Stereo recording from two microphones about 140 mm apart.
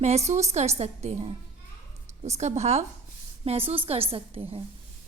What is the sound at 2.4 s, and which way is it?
A woman's voice, 55° right (ahead or behind).